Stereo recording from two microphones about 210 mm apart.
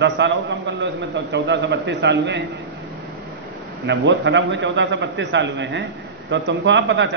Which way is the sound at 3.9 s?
60° right (ahead or behind).